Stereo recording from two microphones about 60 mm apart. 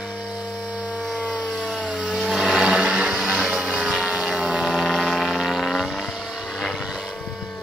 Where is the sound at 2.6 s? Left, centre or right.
Centre.